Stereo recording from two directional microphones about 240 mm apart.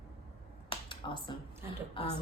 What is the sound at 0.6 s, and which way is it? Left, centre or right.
Finger snapping, centre.